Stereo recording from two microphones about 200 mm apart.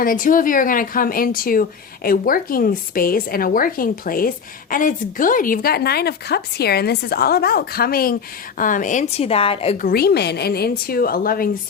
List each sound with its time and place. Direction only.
0.0 s a woman's voice: 45° left (ahead or behind)
9.8 s speech: 50° left (ahead or behind)